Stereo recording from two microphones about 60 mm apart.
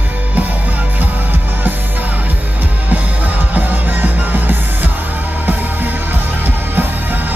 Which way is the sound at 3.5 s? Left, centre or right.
Right.